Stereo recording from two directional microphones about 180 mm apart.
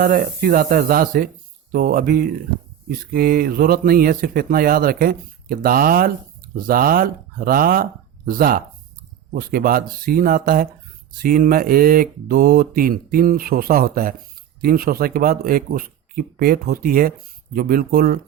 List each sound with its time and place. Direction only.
0.0 s speech: 50° right (ahead or behind)